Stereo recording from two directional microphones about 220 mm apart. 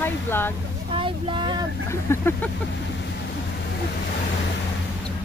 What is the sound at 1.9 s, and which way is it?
Speech, 10° left (ahead or behind).